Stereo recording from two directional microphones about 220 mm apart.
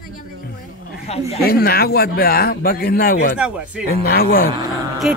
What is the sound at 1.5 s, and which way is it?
Speech, 45° left (ahead or behind).